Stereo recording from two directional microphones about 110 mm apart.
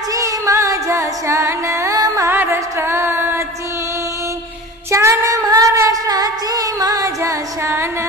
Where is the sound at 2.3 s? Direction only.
20° right (ahead or behind).